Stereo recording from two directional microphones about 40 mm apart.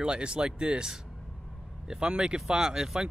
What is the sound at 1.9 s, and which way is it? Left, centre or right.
Speech, right.